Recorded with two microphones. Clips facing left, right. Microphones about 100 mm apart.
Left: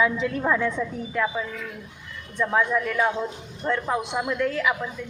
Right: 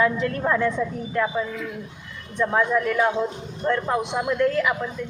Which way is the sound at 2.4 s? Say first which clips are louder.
Right 2 dB; 5° right (ahead or behind).